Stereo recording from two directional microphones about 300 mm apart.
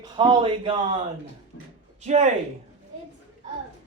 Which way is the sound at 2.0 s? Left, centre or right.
Right.